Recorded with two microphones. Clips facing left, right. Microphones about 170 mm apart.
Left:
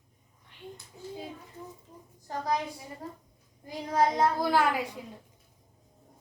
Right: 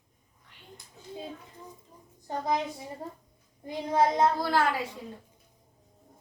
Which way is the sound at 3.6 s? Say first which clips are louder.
Right 1 dB; 25° right (ahead or behind).